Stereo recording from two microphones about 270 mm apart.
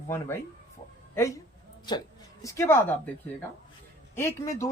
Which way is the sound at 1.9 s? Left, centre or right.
Centre.